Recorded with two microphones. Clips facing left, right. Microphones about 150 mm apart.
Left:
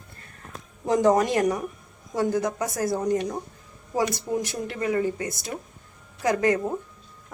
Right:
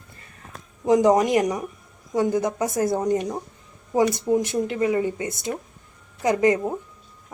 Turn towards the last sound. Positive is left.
turn(degrees=-15)  # may be behind; listen again after turning